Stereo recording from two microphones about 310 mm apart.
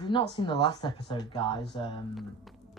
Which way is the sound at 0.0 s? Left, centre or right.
Centre.